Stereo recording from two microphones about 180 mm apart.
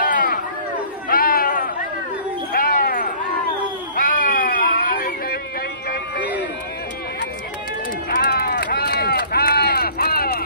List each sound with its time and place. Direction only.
0.0 s chatter: 50° left (ahead or behind)
2.5 s a sound: 55° left (ahead or behind)
8.2 s run: 60° left (ahead or behind)